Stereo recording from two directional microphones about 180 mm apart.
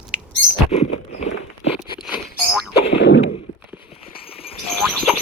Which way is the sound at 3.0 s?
80° left.